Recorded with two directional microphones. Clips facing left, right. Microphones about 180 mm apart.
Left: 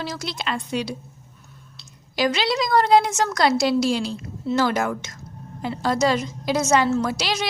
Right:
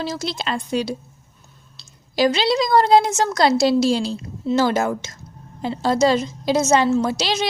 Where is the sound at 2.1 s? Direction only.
30° right (ahead or behind).